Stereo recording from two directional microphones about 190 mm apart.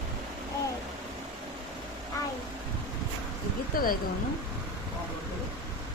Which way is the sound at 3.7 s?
50° left (ahead or behind).